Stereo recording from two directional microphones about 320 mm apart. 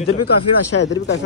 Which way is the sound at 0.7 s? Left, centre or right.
Left.